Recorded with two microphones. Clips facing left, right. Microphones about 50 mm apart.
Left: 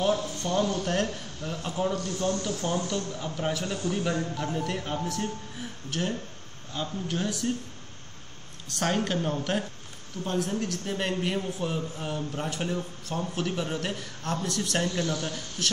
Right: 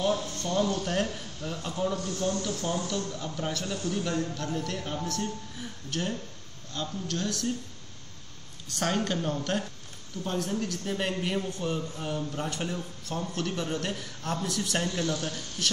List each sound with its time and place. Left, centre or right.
0.0 s a man's voice: centre
8.6 s a man's voice: centre